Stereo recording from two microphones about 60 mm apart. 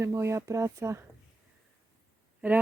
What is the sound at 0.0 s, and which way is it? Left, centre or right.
Speech, right.